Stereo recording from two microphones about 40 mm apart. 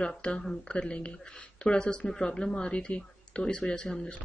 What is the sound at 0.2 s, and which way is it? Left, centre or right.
Speech, centre.